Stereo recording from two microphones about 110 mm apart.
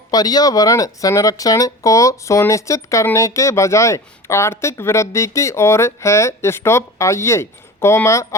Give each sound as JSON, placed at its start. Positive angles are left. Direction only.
{"t": 0.1, "sound": "speech", "side_deg": 35}